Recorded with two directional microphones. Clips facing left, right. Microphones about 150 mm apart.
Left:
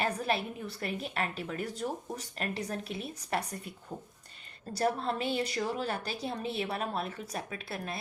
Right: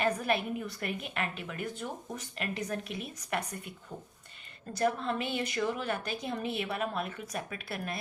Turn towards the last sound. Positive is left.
turn(degrees=25)  # may be behind; listen again after turning